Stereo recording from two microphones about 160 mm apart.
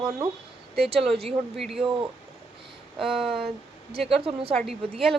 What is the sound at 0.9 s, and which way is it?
Speech, centre (ahead or behind).